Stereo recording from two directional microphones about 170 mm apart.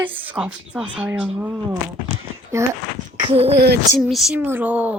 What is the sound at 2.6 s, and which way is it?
Speech, 15° right (ahead or behind).